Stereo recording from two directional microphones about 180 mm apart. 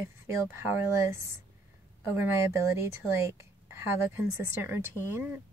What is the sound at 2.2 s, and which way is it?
A woman's voice, 15° right (ahead or behind).